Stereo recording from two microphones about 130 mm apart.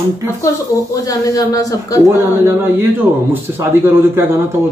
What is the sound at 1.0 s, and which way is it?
Speech, 25° left (ahead or behind).